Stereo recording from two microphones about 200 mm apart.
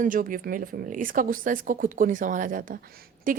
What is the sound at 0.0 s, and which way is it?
Speech, 45° right (ahead or behind).